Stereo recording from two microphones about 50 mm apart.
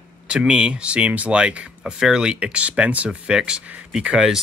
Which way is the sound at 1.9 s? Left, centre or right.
Centre.